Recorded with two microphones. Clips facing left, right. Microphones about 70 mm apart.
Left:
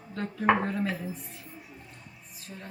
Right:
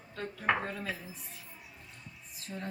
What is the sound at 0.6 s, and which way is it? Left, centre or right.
Speech, left.